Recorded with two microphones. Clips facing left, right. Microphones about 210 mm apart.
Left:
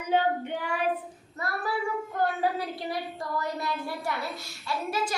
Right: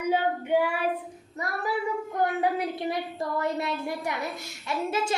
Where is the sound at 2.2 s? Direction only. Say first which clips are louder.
Right 2 dB; 15° right (ahead or behind).